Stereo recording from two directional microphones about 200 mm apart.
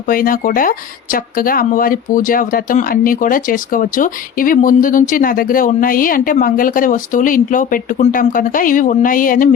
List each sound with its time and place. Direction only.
0.1 s speech: 45° left (ahead or behind)